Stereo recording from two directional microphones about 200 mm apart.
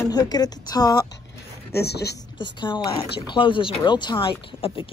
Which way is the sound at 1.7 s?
55° left (ahead or behind).